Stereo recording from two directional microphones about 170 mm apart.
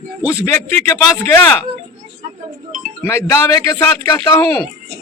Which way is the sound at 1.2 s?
15° left (ahead or behind).